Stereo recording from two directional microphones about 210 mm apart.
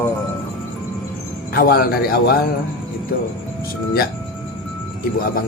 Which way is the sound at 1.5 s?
45° left (ahead or behind).